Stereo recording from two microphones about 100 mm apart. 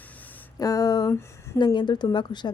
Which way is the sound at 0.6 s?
35° left (ahead or behind).